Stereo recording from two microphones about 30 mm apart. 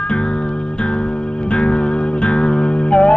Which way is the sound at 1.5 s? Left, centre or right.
Left.